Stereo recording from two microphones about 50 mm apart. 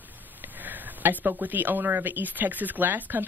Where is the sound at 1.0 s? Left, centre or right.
Right.